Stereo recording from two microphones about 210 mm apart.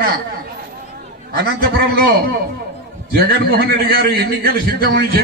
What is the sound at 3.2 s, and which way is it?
A man's voice, 50° right (ahead or behind).